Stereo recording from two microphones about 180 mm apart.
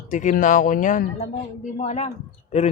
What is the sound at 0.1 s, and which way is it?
A man's voice, 45° left (ahead or behind).